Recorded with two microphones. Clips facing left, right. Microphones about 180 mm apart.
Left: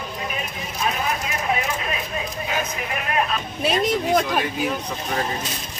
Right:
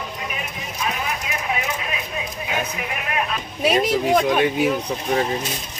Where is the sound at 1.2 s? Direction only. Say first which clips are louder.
Left 1 dB; 40° left (ahead or behind).